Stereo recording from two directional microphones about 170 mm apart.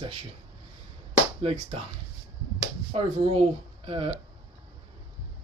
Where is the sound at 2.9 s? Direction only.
35° right (ahead or behind).